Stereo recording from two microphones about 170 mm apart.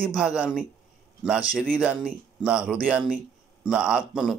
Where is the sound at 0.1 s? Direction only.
5° right (ahead or behind).